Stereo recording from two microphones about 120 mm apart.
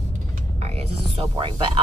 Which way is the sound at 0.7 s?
55° right (ahead or behind).